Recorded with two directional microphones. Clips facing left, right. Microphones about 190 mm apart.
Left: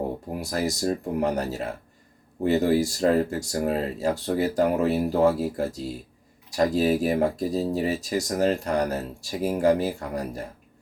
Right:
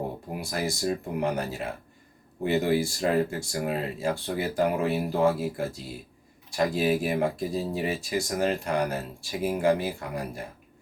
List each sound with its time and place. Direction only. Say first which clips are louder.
0.3 s speech: left 3 dB; 40° left (ahead or behind)